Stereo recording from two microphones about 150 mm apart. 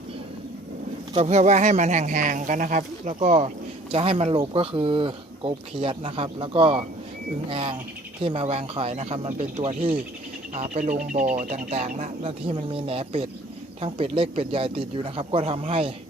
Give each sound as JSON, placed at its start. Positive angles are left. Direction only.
{"t": 1.1, "sound": "speech", "side_deg": -45}
{"t": 3.9, "sound": "speech", "side_deg": -40}
{"t": 10.5, "sound": "speech", "side_deg": -55}